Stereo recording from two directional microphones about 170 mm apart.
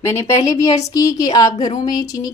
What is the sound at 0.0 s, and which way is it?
A woman's voice, 15° left (ahead or behind).